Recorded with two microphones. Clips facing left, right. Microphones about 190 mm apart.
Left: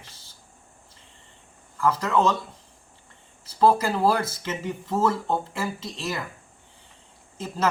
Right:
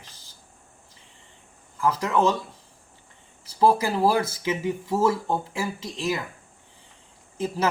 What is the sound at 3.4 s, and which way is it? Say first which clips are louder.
Speech: even; 15° right (ahead or behind).